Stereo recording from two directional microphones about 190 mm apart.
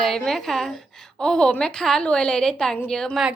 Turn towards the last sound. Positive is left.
turn(degrees=0)  # may be behind; listen again after turning